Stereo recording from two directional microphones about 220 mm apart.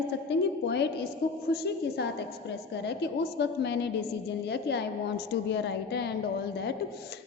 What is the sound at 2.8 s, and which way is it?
A woman's voice, 50° left (ahead or behind).